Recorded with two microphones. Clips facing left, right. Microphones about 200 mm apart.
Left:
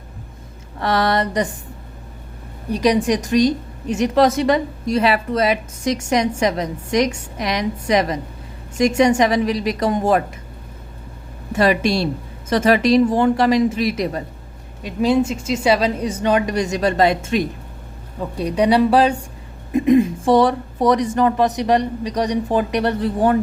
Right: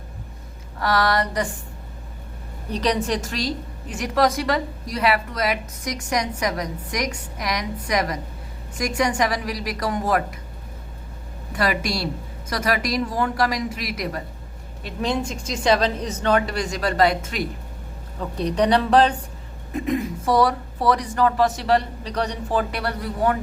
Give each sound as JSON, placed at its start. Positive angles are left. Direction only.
{"t": 0.8, "sound": "a woman's voice", "side_deg": 25}
{"t": 2.7, "sound": "a woman's voice", "side_deg": 10}
{"t": 11.5, "sound": "a woman's voice", "side_deg": 25}
{"t": 14.8, "sound": "a woman's voice", "side_deg": 5}
{"t": 18.2, "sound": "a woman's voice", "side_deg": 10}
{"t": 19.7, "sound": "a woman's voice", "side_deg": 20}